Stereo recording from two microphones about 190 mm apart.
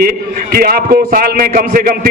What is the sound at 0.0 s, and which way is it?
A man's voice, 50° right (ahead or behind).